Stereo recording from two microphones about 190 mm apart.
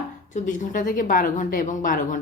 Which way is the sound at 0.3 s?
40° left (ahead or behind).